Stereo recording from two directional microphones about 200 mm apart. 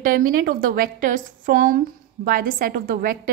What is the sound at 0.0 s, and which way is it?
A woman's voice, 45° right (ahead or behind).